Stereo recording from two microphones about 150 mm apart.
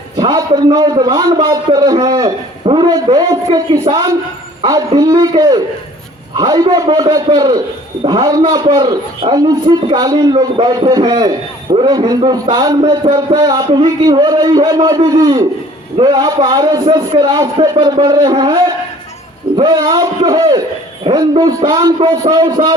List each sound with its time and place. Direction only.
0.2 s a man's voice: 25° right (ahead or behind)
19.5 s a man's voice: 30° right (ahead or behind)